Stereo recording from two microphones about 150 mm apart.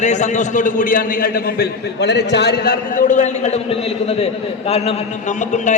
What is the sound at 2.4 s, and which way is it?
Speech, 90° left.